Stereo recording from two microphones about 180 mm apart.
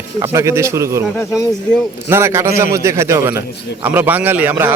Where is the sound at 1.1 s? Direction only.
15° left (ahead or behind).